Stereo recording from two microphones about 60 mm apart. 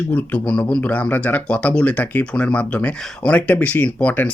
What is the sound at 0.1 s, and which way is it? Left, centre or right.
Speech, left.